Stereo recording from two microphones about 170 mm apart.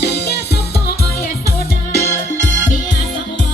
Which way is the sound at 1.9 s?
65° left (ahead or behind).